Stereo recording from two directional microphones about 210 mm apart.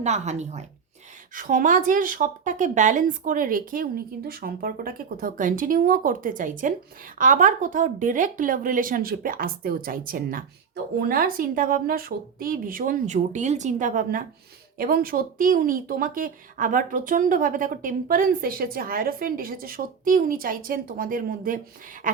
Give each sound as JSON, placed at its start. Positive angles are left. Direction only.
{"t": 0.0, "sound": "a woman's voice", "side_deg": -35}